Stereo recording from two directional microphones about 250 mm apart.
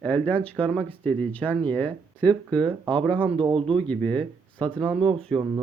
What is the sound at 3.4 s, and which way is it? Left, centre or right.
Speech, right.